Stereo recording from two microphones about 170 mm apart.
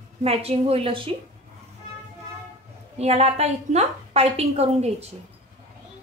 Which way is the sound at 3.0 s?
40° right (ahead or behind).